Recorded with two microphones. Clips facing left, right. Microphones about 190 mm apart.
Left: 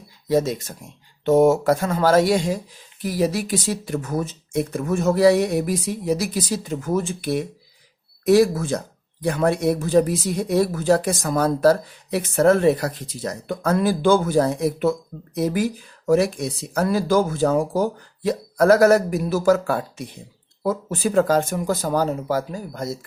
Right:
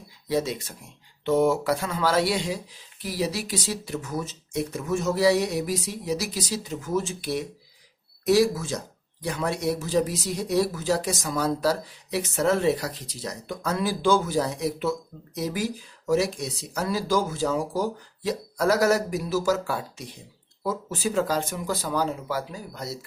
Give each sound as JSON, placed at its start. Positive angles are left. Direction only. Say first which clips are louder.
{"t": 0.3, "sound": "speech", "louder": "left 6 dB", "side_deg": 45}